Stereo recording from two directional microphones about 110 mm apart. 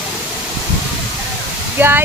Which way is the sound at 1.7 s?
20° right (ahead or behind).